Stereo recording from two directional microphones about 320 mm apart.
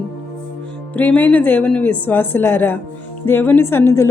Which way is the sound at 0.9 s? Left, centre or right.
Centre.